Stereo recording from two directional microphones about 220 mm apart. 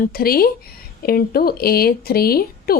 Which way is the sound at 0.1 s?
45° left (ahead or behind).